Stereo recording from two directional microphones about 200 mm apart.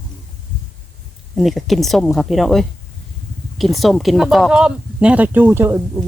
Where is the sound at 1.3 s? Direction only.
Centre (ahead or behind).